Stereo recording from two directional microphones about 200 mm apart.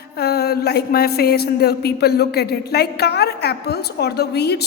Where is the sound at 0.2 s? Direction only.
50° left (ahead or behind).